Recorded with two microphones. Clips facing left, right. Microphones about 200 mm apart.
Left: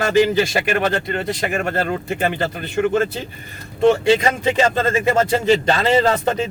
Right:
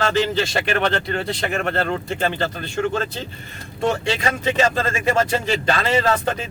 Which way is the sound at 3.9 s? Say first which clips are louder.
Left 7 dB; 25° left (ahead or behind).